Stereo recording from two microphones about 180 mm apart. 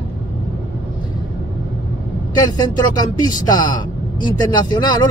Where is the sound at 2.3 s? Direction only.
20° left (ahead or behind).